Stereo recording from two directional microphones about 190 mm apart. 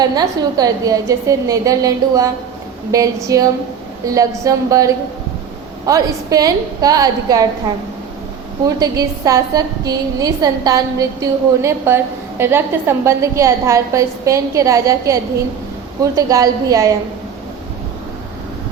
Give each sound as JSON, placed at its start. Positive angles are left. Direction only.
{"t": 0.0, "sound": "a woman's voice", "side_deg": -20}
{"t": 8.6, "sound": "a woman's voice", "side_deg": -20}